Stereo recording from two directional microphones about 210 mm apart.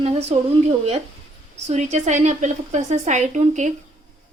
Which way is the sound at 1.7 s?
35° right (ahead or behind).